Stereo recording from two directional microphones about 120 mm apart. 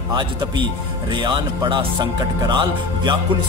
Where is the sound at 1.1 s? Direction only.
40° right (ahead or behind).